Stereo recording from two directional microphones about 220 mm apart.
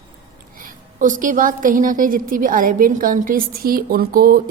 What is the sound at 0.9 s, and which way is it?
A woman's voice, 35° right (ahead or behind).